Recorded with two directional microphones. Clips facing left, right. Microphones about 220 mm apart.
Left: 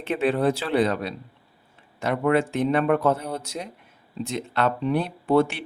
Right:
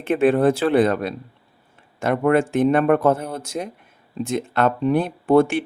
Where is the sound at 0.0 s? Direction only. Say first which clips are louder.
Right 6 dB; 50° right (ahead or behind).